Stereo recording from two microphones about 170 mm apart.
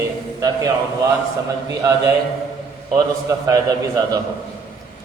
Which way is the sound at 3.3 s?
20° right (ahead or behind).